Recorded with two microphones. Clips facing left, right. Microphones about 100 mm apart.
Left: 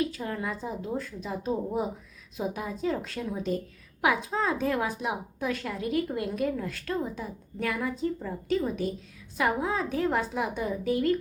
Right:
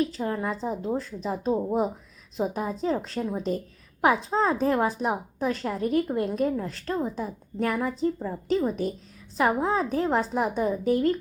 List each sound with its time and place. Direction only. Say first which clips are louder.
0.0 s a woman's voice: right 4 dB; 30° right (ahead or behind)